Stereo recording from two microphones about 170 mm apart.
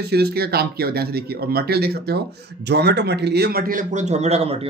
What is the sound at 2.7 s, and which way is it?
A man's voice, 80° right.